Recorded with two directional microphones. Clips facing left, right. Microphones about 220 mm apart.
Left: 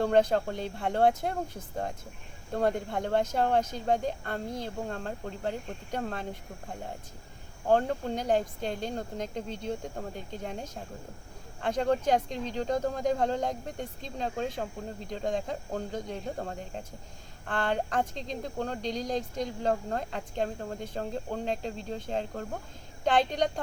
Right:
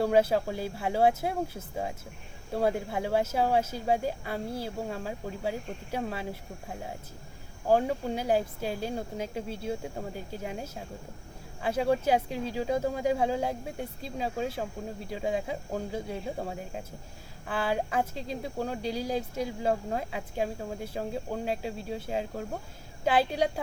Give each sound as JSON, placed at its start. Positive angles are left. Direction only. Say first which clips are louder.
{"t": 0.0, "sound": "speech", "louder": "even", "side_deg": -5}
{"t": 7.7, "sound": "speech", "louder": "even", "side_deg": -5}